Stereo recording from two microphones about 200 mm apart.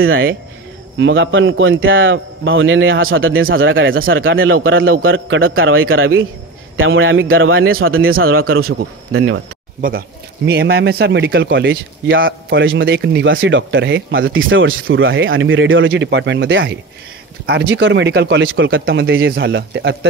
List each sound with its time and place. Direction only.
0.0 s speech: 85° right
0.9 s speech: 65° right (ahead or behind)
5.6 s speech: 90° right
6.8 s speech: 80° right
8.5 s a man's voice: 50° right (ahead or behind)
9.1 s speech: 75° right (ahead or behind)
9.8 s speech: 45° right (ahead or behind)